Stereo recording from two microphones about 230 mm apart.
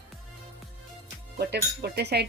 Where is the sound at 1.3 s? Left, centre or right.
Right.